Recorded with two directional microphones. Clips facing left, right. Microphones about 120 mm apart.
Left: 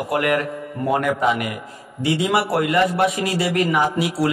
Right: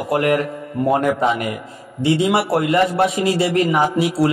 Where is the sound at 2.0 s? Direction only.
25° right (ahead or behind).